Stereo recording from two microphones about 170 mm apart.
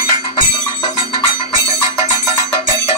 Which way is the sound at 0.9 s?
20° right (ahead or behind).